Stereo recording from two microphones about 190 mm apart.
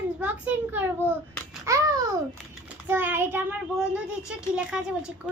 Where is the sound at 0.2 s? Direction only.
10° right (ahead or behind).